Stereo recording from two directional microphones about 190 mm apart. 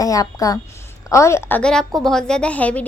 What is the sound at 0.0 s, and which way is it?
A woman's voice, 20° left (ahead or behind).